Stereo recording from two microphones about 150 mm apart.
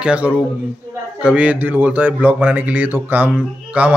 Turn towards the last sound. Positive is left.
turn(degrees=-10)  # may be behind; listen again after turning